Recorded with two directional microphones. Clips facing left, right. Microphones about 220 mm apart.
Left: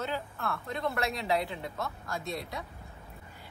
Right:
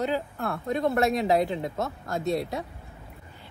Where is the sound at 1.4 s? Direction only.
20° right (ahead or behind).